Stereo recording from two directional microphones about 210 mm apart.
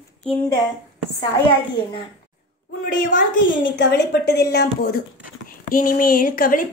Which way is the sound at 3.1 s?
40° left (ahead or behind).